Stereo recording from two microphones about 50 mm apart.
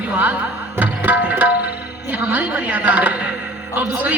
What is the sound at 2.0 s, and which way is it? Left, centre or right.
A man's voice, right.